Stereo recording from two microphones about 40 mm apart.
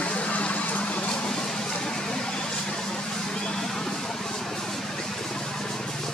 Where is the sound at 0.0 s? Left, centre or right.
Left.